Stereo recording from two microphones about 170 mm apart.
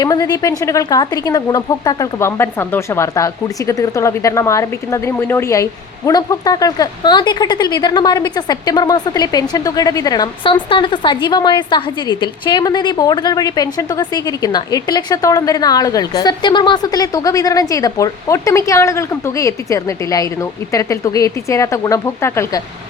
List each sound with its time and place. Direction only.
0.0 s speech: 20° left (ahead or behind)